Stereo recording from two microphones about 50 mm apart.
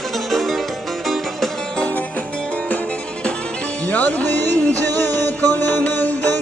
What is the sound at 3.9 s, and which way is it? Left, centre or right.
Music, left.